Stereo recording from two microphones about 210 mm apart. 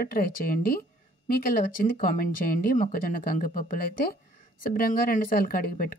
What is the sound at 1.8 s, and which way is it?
Speech, 40° left (ahead or behind).